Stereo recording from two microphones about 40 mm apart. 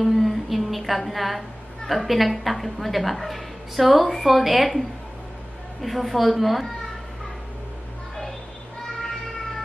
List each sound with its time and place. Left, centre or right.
0.0 s humming: centre
1.9 s a woman's voice: centre